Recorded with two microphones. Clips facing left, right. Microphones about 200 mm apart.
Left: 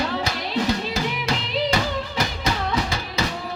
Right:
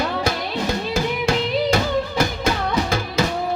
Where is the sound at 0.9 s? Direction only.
50° right (ahead or behind).